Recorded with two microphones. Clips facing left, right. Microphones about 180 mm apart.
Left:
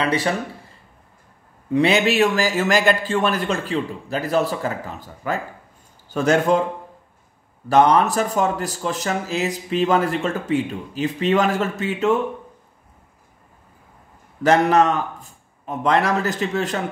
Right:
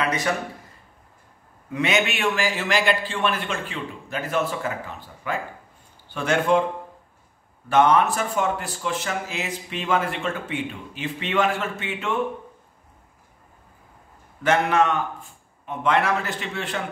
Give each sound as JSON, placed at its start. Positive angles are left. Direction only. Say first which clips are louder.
{"t": 0.0, "sound": "a sound", "louder": "left 4 dB", "side_deg": 30}
{"t": 1.7, "sound": "speech", "louder": "left 6 dB", "side_deg": 35}
{"t": 7.6, "sound": "speech", "louder": "left 3 dB", "side_deg": 35}
{"t": 14.4, "sound": "speech", "louder": "left 4 dB", "side_deg": 40}